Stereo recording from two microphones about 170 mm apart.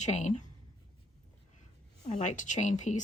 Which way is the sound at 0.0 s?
40° left (ahead or behind).